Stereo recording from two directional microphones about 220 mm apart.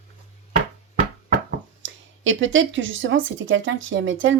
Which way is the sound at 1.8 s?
60° right (ahead or behind).